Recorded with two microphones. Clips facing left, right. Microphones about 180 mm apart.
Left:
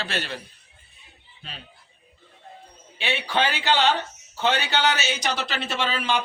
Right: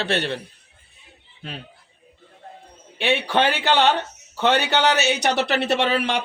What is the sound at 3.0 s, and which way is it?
Speech, 60° right (ahead or behind).